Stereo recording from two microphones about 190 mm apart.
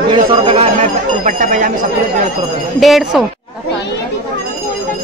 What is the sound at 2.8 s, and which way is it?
Speech, centre (ahead or behind).